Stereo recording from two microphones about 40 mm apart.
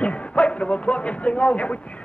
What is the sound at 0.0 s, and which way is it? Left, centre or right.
Speech, left.